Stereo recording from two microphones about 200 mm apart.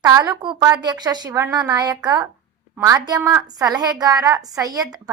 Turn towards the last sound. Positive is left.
turn(degrees=-20)  # may be behind; listen again after turning